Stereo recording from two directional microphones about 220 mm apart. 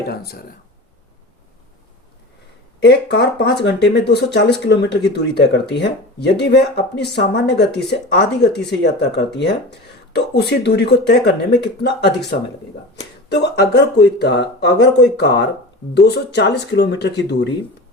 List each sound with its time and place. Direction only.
0.1 s speech: 45° left (ahead or behind)
2.8 s speech: 50° left (ahead or behind)